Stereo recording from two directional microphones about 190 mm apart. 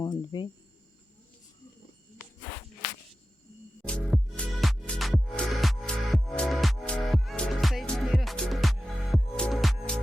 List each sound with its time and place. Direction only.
0.0 s cricket: 20° left (ahead or behind)
3.8 s music: 5° left (ahead or behind)